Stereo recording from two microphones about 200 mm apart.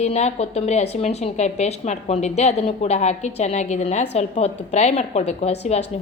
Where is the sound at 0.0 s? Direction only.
35° left (ahead or behind).